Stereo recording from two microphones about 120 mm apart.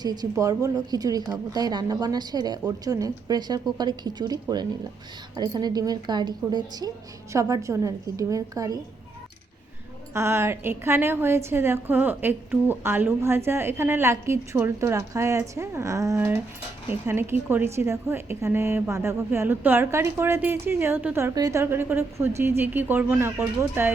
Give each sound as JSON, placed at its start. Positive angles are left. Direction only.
{"t": 0.0, "sound": "a woman's voice", "side_deg": -35}
{"t": 10.2, "sound": "a woman's voice", "side_deg": -20}